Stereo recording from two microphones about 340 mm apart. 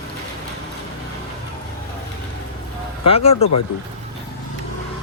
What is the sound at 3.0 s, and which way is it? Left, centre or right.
Speech, centre.